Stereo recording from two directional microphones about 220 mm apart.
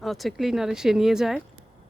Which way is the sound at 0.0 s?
Centre (ahead or behind).